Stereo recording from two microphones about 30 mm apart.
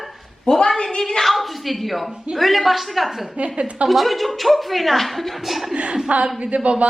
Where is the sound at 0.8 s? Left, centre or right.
Left.